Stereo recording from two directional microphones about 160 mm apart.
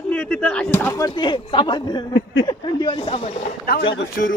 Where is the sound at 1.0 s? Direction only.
30° left (ahead or behind).